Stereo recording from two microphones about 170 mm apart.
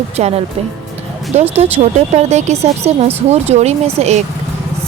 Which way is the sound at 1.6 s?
40° right (ahead or behind).